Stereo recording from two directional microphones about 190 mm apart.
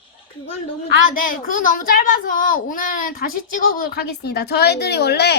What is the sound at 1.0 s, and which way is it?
A woman's voice, 45° left (ahead or behind).